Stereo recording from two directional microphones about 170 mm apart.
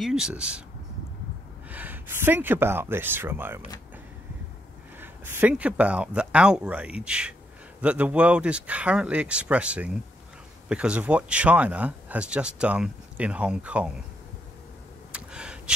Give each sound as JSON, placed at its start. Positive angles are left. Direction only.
{"t": 0.0, "sound": "speech", "side_deg": -5}
{"t": 1.7, "sound": "speech", "side_deg": -10}
{"t": 4.9, "sound": "speech", "side_deg": -10}
{"t": 15.1, "sound": "gasp", "side_deg": -5}